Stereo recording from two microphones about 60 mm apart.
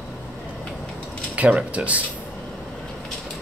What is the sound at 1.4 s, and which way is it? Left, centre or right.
Speech, right.